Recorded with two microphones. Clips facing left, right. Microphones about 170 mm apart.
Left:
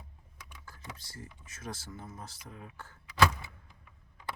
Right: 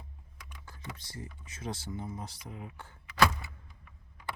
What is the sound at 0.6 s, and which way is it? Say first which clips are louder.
Speech: right 2 dB; 20° right (ahead or behind).